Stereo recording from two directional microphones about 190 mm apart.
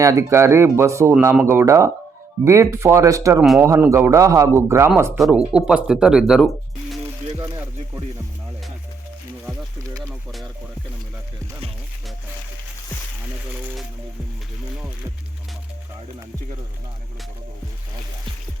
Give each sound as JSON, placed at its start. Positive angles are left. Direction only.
{"t": 0.0, "sound": "speech", "side_deg": -15}
{"t": 5.1, "sound": "speech", "side_deg": -5}
{"t": 7.3, "sound": "music", "side_deg": -15}
{"t": 10.0, "sound": "a sound", "side_deg": 0}